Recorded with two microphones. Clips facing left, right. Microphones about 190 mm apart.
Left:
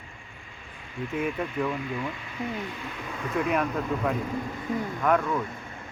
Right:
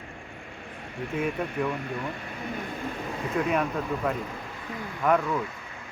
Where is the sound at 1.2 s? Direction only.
Centre (ahead or behind).